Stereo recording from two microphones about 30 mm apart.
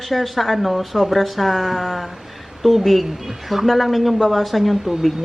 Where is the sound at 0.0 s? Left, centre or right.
Centre.